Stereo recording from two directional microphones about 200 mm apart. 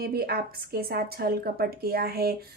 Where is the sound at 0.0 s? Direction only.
50° right (ahead or behind).